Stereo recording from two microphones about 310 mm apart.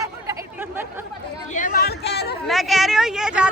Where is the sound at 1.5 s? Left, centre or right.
Left.